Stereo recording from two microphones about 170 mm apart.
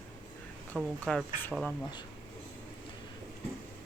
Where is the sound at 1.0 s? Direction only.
5° left (ahead or behind).